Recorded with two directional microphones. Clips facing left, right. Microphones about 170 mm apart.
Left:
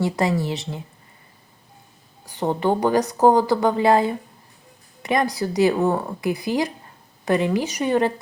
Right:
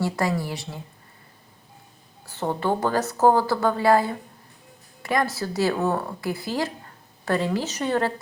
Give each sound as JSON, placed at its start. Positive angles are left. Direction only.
{"t": 0.0, "sound": "speech", "side_deg": 20}
{"t": 2.2, "sound": "speech", "side_deg": 15}